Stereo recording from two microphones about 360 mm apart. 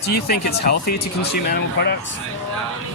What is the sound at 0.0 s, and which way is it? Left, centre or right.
Speech, left.